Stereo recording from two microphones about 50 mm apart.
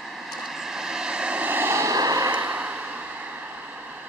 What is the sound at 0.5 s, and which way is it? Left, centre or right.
Vehicle, centre.